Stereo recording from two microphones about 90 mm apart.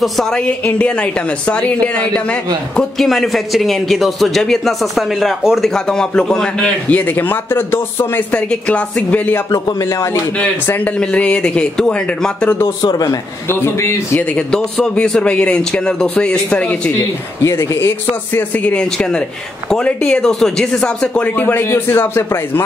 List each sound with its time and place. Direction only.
0.0 s a man's voice: 5° left (ahead or behind)
0.5 s a man's voice: 15° left (ahead or behind)
7.0 s speech: 20° left (ahead or behind)
8.4 s speech: 10° left (ahead or behind)
9.5 s speech: 40° left (ahead or behind)
10.7 s speech: 15° left (ahead or behind)
13.5 s speech: 25° left (ahead or behind)
14.3 s speech: 10° left (ahead or behind)
17.4 s speech: 30° left (ahead or behind)